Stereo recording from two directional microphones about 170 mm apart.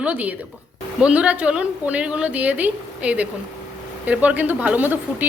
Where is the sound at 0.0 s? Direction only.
10° right (ahead or behind).